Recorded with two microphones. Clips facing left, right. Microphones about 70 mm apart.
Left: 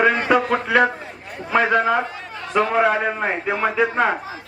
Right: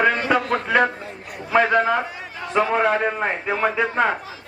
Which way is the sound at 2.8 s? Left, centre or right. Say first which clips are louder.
Left 1 dB; centre.